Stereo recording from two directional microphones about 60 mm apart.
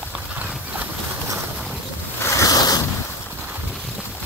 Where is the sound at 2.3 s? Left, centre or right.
Left.